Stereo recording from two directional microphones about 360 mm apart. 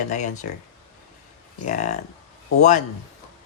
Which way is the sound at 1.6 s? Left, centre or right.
Centre.